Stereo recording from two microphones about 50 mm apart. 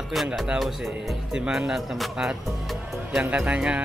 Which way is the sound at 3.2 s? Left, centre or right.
Right.